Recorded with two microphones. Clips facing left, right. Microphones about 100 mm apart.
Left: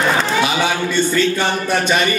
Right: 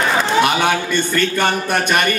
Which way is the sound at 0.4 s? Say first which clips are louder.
Right 2 dB; 55° right (ahead or behind).